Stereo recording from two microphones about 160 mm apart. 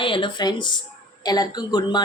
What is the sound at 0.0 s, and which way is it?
A woman's voice, 30° left (ahead or behind).